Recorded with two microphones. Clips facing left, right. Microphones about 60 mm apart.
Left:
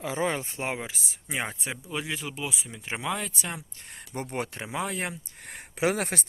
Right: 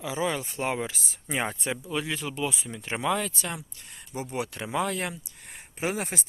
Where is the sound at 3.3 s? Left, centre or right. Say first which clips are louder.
Right 1 dB; centre.